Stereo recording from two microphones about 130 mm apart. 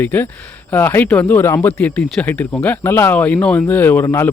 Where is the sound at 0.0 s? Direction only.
15° left (ahead or behind).